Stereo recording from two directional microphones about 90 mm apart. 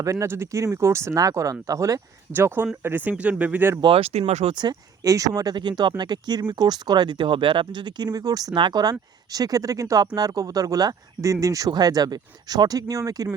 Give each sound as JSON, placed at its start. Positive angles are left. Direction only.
{"t": 0.0, "sound": "speech", "side_deg": -35}
{"t": 2.3, "sound": "speech", "side_deg": -25}
{"t": 3.8, "sound": "speech", "side_deg": -65}
{"t": 4.5, "sound": "speech", "side_deg": -50}
{"t": 5.5, "sound": "speech", "side_deg": -55}
{"t": 8.5, "sound": "speech", "side_deg": -55}